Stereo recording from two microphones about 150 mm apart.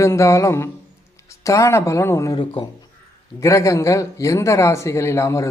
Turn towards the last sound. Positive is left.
turn(degrees=20)  # may be behind; listen again after turning